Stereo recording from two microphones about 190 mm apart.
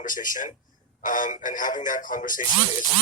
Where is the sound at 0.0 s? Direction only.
45° left (ahead or behind).